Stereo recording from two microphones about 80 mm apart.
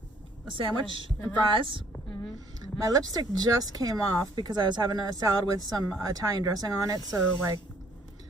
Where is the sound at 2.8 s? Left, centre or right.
Right.